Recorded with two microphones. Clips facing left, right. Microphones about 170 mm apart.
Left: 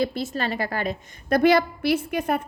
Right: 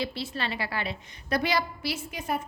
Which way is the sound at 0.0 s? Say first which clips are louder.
Left 7 dB; 45° left (ahead or behind).